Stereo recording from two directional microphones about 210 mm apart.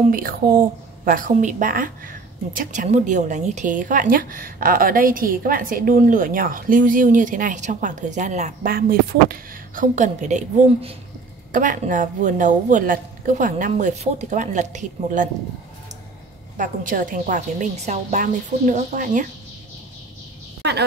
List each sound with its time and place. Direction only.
0.1 s a woman's voice: 45° right (ahead or behind)
16.5 s a woman's voice: 40° right (ahead or behind)